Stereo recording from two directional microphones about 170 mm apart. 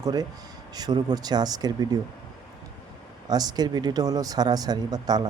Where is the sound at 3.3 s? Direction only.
25° right (ahead or behind).